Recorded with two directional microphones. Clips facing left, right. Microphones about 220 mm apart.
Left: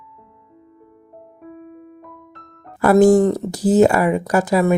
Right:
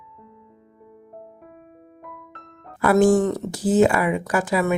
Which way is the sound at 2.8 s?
40° left (ahead or behind).